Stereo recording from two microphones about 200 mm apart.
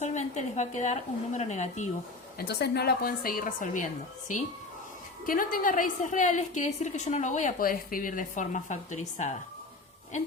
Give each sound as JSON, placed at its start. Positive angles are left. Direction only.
{"t": 0.0, "sound": "a woman's voice", "side_deg": 35}
{"t": 2.4, "sound": "a woman's voice", "side_deg": 55}